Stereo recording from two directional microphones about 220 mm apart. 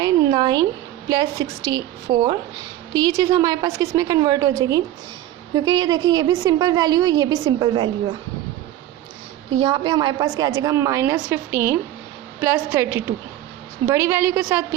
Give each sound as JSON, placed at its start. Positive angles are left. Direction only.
{"t": 0.0, "sound": "a woman's voice", "side_deg": -20}
{"t": 2.0, "sound": "a woman's voice", "side_deg": -25}
{"t": 9.6, "sound": "a woman's voice", "side_deg": -25}